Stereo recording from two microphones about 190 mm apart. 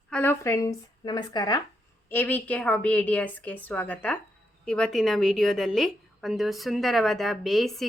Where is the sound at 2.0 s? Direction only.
10° left (ahead or behind).